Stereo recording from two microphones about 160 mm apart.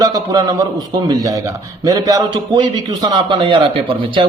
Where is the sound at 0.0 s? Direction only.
25° right (ahead or behind).